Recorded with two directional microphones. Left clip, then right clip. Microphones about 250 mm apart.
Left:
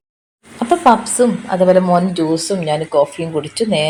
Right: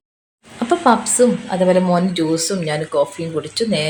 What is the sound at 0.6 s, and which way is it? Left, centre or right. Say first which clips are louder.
Speech: left 3 dB; centre.